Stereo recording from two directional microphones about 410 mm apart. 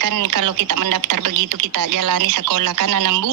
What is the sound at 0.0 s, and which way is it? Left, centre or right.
Speech, right.